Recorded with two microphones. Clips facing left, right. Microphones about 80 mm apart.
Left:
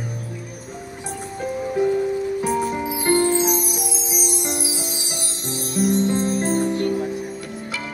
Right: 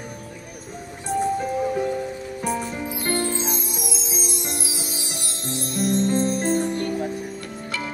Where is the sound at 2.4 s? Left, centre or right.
Centre.